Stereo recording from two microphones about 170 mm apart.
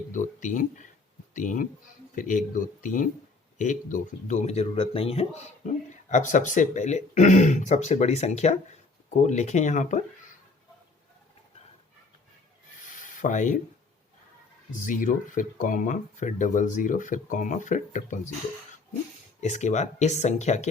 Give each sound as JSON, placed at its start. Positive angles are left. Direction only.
{"t": 0.1, "sound": "speech", "side_deg": 50}
{"t": 12.9, "sound": "rub", "side_deg": 50}
{"t": 14.8, "sound": "speech", "side_deg": 50}
{"t": 19.4, "sound": "speech", "side_deg": 45}